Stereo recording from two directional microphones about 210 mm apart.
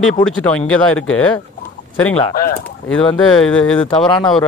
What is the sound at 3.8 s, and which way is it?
Speech, 25° left (ahead or behind).